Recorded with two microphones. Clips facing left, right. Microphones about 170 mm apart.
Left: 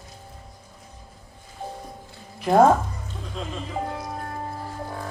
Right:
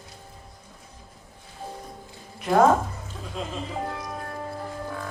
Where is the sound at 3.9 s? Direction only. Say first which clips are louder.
Left 2 dB; 25° left (ahead or behind).